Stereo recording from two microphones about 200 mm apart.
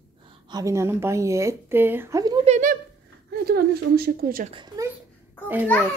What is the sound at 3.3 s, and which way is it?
A woman's voice, 50° right (ahead or behind).